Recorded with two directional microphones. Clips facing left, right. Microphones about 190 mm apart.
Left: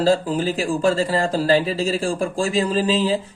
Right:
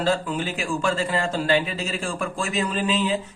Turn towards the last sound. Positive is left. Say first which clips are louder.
# left 4 dB
turn(degrees=35)  # may be behind; listen again after turning